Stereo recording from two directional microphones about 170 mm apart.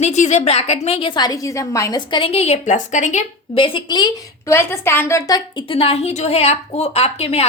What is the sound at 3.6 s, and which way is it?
A woman's voice, 30° left (ahead or behind).